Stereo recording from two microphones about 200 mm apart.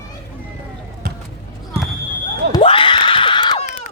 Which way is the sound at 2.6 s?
25° left (ahead or behind).